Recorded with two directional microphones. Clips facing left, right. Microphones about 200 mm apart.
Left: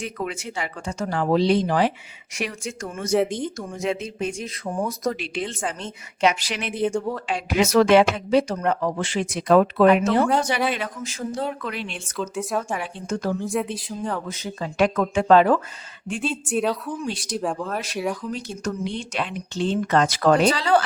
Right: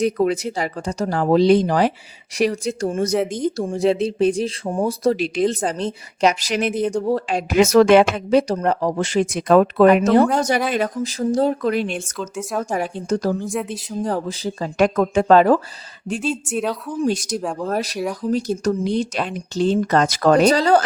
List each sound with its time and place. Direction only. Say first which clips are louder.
0.0 s speech: right 11 dB; 35° right (ahead or behind)
12.2 s speech: left 1 dB; centre (ahead or behind)
12.6 s speech: right 6 dB; 40° right (ahead or behind)
13.4 s speech: even; centre (ahead or behind)
14.0 s speech: right 8 dB; 35° right (ahead or behind)
16.5 s speech: even; centre (ahead or behind)
17.0 s speech: right 6 dB; 45° right (ahead or behind)